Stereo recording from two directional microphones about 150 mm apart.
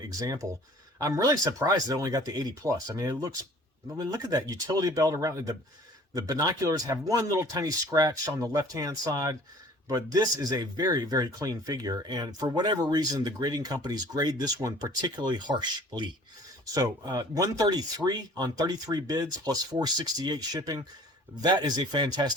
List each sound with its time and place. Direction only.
0.0 s speech: 25° right (ahead or behind)